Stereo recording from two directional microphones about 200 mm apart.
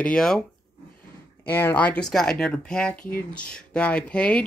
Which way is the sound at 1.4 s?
10° left (ahead or behind).